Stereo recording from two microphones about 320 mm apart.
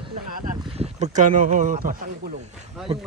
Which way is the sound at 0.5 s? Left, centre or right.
Centre.